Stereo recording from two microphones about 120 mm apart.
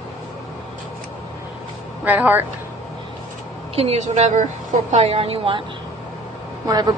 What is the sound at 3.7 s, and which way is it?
Speech, 60° right (ahead or behind).